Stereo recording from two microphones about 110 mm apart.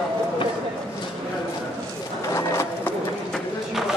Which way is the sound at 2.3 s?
25° left (ahead or behind).